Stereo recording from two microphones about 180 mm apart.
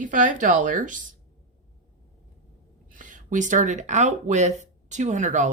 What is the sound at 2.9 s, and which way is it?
Speech, 45° right (ahead or behind).